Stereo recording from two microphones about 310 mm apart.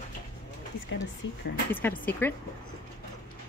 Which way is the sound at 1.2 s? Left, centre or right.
Left.